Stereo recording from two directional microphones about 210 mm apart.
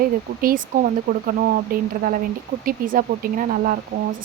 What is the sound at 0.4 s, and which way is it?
Speech, 40° right (ahead or behind).